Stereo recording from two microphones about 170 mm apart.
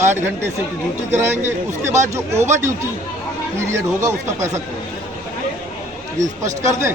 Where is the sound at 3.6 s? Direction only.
15° right (ahead or behind).